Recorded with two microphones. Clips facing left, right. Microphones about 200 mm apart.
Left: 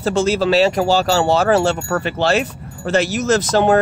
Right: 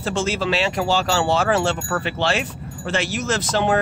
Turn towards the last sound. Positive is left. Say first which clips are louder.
# left 6 dB
turn(degrees=40)  # may be behind; listen again after turning